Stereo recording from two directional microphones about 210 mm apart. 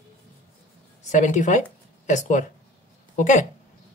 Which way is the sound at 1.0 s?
35° left (ahead or behind).